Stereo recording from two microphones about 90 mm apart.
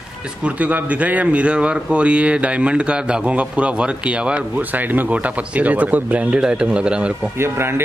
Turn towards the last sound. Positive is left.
turn(degrees=-25)  # may be behind; listen again after turning